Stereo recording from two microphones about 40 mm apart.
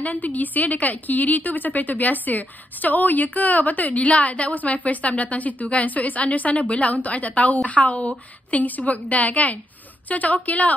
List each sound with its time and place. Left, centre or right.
0.0 s a woman's voice: left